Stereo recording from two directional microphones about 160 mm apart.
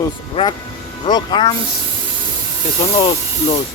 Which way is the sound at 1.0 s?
25° left (ahead or behind).